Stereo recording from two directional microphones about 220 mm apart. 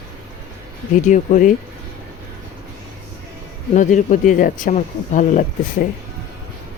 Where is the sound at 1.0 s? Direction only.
35° left (ahead or behind).